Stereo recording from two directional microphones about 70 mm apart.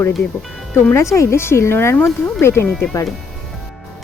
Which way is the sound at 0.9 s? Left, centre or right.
Left.